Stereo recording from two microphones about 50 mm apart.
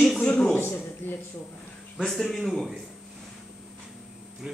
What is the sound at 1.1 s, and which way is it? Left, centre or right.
Speech, left.